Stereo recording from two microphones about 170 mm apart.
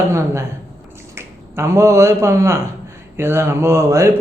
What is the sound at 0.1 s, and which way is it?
A man's voice, 15° right (ahead or behind).